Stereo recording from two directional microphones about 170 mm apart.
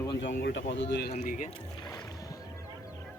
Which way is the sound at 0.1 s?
90° left.